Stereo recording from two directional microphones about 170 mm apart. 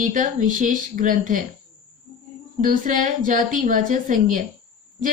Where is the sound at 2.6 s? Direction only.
50° right (ahead or behind).